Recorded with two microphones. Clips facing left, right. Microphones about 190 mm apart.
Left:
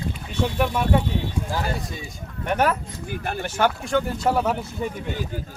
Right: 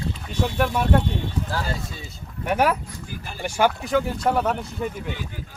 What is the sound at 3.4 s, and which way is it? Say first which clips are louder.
Speech: right 3 dB; 10° right (ahead or behind).